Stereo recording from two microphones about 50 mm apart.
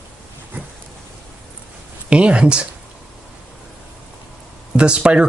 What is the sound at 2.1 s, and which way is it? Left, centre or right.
Speech, right.